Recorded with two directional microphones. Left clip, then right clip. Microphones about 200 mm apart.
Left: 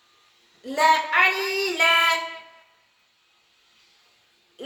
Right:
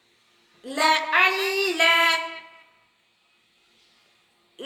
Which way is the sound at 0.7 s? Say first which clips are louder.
Left 1 dB; 40° right (ahead or behind).